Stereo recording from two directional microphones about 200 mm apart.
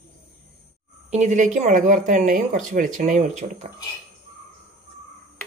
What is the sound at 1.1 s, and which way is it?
Speech, 35° right (ahead or behind).